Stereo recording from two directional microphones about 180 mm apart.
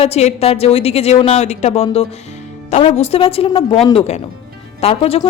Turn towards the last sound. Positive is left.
turn(degrees=35)  # may be behind; listen again after turning